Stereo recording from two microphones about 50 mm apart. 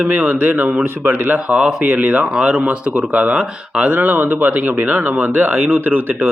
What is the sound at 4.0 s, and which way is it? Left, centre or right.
Speech, right.